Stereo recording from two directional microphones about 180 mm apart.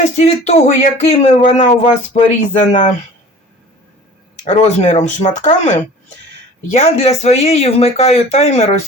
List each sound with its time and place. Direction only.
0.0 s speech: 35° left (ahead or behind)
4.4 s speech: 40° left (ahead or behind)